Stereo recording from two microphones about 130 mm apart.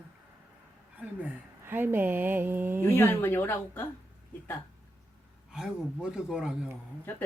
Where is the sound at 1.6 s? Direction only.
15° right (ahead or behind).